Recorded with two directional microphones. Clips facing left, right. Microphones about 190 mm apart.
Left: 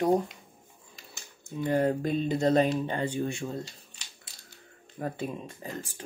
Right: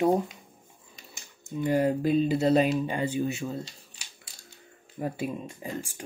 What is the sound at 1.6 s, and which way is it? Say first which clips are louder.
Speech: right 1 dB; 10° right (ahead or behind).